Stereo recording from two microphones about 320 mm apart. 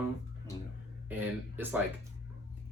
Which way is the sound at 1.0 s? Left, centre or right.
Centre.